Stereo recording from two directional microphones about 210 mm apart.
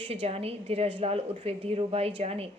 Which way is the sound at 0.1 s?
30° right (ahead or behind).